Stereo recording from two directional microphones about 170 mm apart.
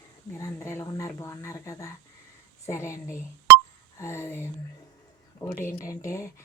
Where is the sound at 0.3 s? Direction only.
15° left (ahead or behind).